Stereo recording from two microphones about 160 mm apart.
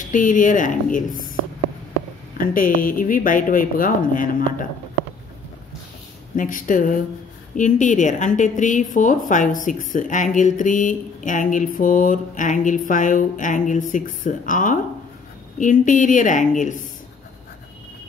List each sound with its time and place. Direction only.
0.1 s a woman's voice: 55° left (ahead or behind)
2.3 s a woman's voice: 60° left (ahead or behind)
6.3 s a woman's voice: 55° left (ahead or behind)